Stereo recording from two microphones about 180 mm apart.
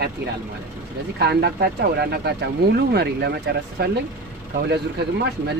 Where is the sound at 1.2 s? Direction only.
65° right (ahead or behind).